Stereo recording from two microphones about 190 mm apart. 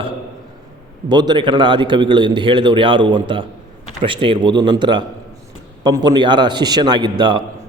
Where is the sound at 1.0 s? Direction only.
20° right (ahead or behind).